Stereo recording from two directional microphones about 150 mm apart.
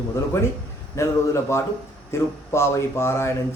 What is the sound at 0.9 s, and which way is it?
A man's voice, 20° left (ahead or behind).